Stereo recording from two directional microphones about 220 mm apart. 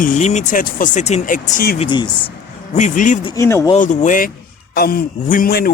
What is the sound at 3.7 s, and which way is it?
A man's voice, 35° left (ahead or behind).